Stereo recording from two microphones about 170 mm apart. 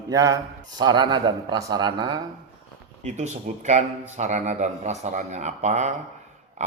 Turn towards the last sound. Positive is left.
turn(degrees=-45)  # may be behind; listen again after turning